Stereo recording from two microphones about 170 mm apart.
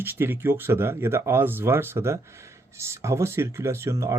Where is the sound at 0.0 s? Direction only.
15° right (ahead or behind).